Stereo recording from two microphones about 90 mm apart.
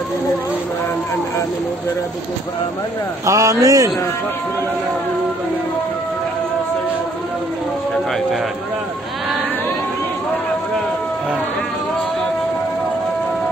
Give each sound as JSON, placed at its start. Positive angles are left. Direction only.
{"t": 3.3, "sound": "speech", "side_deg": -35}